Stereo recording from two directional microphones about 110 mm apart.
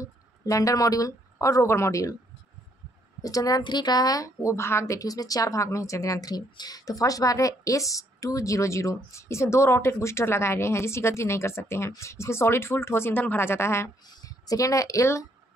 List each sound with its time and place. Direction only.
0.0 s speech: 30° left (ahead or behind)
3.2 s a woman's voice: 30° left (ahead or behind)